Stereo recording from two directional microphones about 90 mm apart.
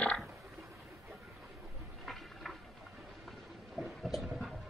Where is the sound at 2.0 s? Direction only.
Centre (ahead or behind).